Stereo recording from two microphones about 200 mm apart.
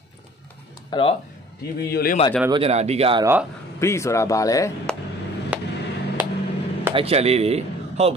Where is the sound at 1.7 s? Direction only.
50° left (ahead or behind).